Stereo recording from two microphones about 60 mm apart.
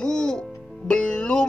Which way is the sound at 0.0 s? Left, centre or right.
Centre.